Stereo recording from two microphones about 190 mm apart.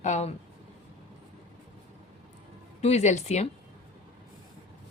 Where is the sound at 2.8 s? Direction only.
35° left (ahead or behind).